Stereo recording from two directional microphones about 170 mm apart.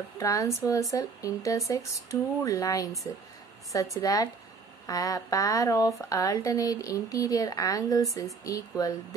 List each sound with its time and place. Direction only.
0.2 s speech: 20° left (ahead or behind)